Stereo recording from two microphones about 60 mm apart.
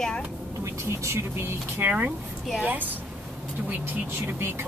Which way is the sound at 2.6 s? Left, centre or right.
Right.